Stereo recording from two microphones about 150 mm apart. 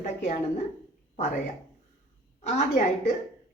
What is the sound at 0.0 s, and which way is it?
Speech, 50° left (ahead or behind).